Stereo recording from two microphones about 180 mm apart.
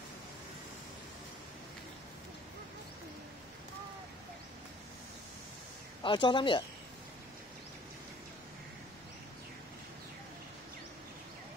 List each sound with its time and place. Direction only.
6.0 s speech: 25° left (ahead or behind)